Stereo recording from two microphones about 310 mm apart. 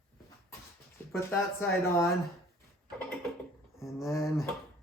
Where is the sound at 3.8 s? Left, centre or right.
Centre.